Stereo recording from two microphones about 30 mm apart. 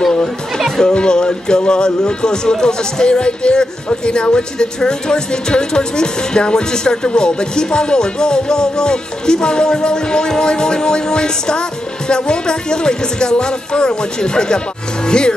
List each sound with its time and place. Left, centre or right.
0.9 s speech: left